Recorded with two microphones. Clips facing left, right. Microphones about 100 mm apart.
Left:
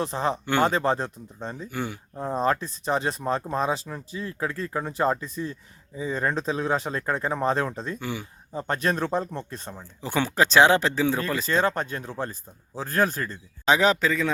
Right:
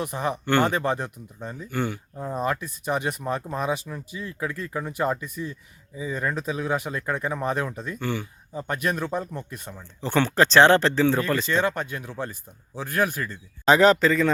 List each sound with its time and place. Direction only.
0.0 s speech: 25° left (ahead or behind)
1.7 s a man's voice: 5° left (ahead or behind)
2.1 s speech: 30° left (ahead or behind)
7.9 s speech: 5° left (ahead or behind)
8.5 s speech: 35° left (ahead or behind)
10.0 s speech: 5° left (ahead or behind)
11.6 s speech: 35° left (ahead or behind)
13.7 s a man's voice: centre (ahead or behind)